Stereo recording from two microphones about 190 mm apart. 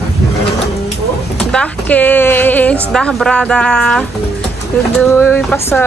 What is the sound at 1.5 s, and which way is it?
A woman's voice, 5° left (ahead or behind).